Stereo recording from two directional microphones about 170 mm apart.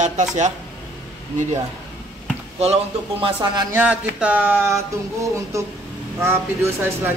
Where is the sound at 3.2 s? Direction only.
25° right (ahead or behind).